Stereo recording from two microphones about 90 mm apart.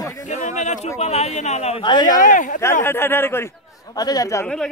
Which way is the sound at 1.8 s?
55° left (ahead or behind).